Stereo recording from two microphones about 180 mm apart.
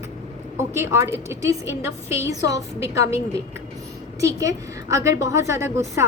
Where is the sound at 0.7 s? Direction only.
15° right (ahead or behind).